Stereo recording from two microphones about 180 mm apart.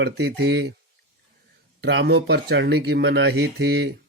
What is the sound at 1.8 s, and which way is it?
Speech, 75° right (ahead or behind).